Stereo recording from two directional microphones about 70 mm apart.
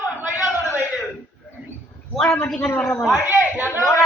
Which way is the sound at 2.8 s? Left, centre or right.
Centre.